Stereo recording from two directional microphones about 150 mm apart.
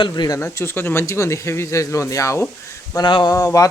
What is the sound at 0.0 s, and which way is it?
Speech, 30° left (ahead or behind).